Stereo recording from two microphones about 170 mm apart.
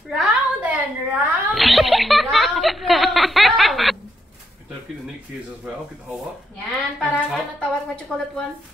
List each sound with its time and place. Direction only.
0.1 s a sound: 5° right (ahead or behind)
2.3 s snicker: centre (ahead or behind)
7.0 s music: centre (ahead or behind)